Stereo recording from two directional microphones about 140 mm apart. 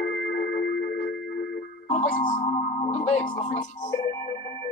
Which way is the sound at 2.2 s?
70° left (ahead or behind).